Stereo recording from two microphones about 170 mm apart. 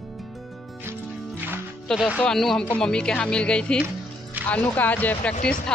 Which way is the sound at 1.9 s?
5° right (ahead or behind).